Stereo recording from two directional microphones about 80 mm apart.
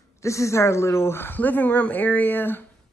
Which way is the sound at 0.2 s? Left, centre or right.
Left.